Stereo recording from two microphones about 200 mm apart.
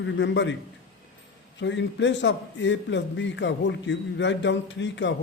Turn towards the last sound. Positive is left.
turn(degrees=65)  # may be behind; listen again after turning